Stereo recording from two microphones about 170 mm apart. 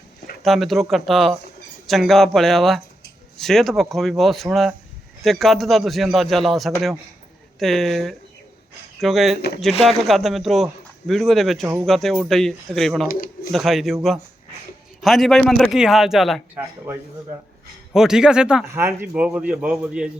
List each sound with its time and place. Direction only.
0.4 s a man's voice: centre (ahead or behind)
11.6 s a man's voice: 15° right (ahead or behind)
11.9 s a man's voice: centre (ahead or behind)
13.1 s speech: 60° left (ahead or behind)
13.5 s a man's voice: centre (ahead or behind)
16.6 s a man's voice: 15° right (ahead or behind)
17.9 s a man's voice: 5° right (ahead or behind)